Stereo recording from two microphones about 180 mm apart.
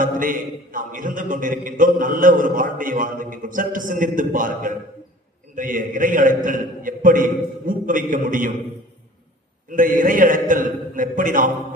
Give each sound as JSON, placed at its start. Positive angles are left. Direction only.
{"t": 0.0, "sound": "a man's voice", "side_deg": -50}
{"t": 9.6, "sound": "a man's voice", "side_deg": -50}